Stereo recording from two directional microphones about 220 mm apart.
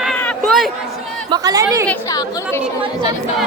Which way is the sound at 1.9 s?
15° left (ahead or behind).